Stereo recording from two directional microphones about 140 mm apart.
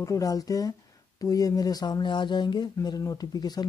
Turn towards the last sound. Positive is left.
turn(degrees=30)  # may be behind; listen again after turning